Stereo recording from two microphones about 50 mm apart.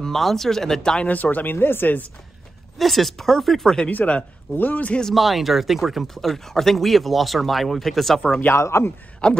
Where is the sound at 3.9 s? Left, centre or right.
Left.